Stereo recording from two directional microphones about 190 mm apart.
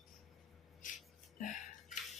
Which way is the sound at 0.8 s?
45° left (ahead or behind).